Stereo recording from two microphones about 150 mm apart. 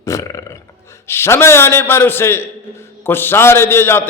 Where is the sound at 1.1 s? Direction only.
15° left (ahead or behind).